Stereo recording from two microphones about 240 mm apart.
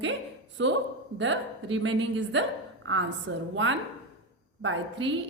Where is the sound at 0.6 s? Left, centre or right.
Right.